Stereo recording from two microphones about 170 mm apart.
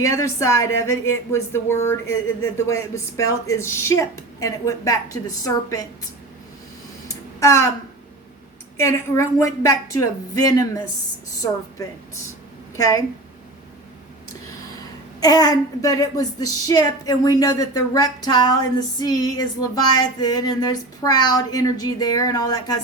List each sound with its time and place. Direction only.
0.0 s speech: 20° left (ahead or behind)
7.3 s speech: 15° left (ahead or behind)
8.8 s a woman's voice: 15° left (ahead or behind)
12.7 s a woman's voice: 20° left (ahead or behind)
15.2 s a woman's voice: 20° left (ahead or behind)